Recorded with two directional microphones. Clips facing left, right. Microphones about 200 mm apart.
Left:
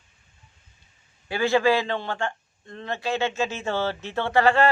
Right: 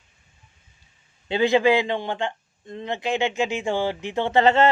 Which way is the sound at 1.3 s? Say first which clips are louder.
Right 2 dB; 20° right (ahead or behind).